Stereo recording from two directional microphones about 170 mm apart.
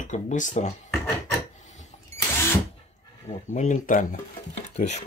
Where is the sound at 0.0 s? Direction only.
45° left (ahead or behind).